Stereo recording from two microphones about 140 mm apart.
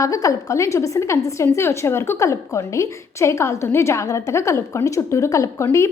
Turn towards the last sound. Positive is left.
turn(degrees=20)  # may be behind; listen again after turning